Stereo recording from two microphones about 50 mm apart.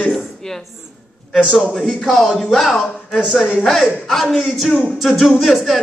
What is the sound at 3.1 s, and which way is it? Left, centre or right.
Speech, centre.